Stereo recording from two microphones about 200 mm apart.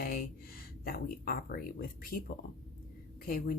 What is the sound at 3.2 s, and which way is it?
Speech, 45° left (ahead or behind).